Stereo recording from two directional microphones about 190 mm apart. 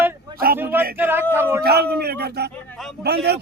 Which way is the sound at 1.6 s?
55° right (ahead or behind).